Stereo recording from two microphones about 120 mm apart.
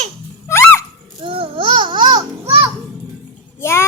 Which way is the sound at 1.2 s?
45° right (ahead or behind).